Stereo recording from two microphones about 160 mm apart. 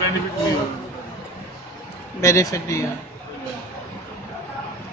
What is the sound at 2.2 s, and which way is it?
Speech, 20° left (ahead or behind).